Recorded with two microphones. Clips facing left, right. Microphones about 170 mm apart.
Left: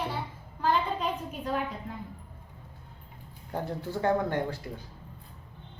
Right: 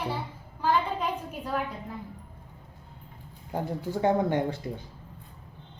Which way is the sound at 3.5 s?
10° right (ahead or behind).